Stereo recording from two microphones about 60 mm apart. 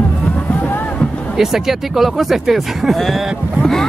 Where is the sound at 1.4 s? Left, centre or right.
Centre.